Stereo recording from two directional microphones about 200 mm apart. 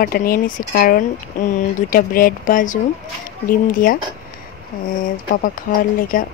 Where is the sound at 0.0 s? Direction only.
45° left (ahead or behind).